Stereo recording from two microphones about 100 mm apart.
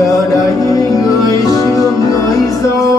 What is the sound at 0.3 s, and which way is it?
Music, 35° left (ahead or behind).